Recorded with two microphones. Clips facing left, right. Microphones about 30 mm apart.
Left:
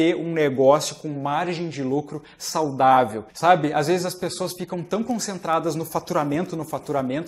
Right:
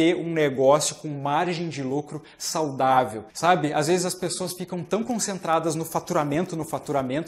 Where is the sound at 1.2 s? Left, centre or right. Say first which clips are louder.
Right 1 dB; centre.